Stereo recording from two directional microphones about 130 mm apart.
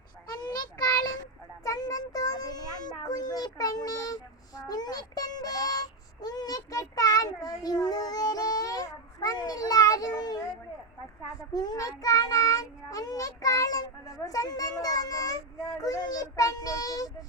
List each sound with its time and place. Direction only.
0.5 s child singing: 30° left (ahead or behind)
11.5 s child singing: 30° left (ahead or behind)